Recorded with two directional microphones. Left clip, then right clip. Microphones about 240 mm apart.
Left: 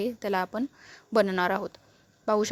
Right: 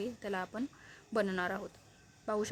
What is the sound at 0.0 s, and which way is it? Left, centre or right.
A woman's voice, left.